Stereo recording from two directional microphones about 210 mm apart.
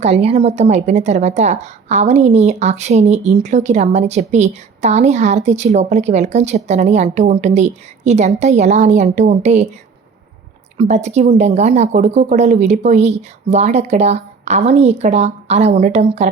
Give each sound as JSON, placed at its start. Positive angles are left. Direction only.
{"t": 0.0, "sound": "a woman's voice", "side_deg": -30}
{"t": 10.8, "sound": "a woman's voice", "side_deg": -35}